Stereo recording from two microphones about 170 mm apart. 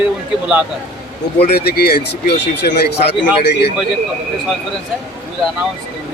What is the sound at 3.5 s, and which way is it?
Speech, 80° left.